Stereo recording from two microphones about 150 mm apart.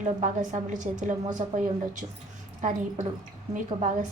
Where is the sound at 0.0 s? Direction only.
55° right (ahead or behind).